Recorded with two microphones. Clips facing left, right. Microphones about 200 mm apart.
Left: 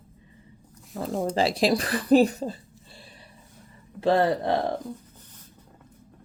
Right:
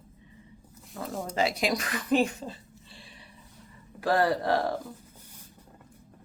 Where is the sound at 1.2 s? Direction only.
30° left (ahead or behind).